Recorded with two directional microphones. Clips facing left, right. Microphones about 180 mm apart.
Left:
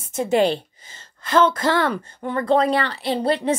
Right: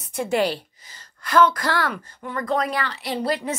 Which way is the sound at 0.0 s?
20° left (ahead or behind).